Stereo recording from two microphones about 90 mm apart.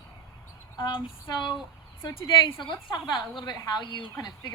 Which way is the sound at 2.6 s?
55° left (ahead or behind).